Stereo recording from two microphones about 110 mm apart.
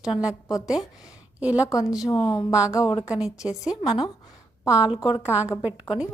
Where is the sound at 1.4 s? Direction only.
10° right (ahead or behind).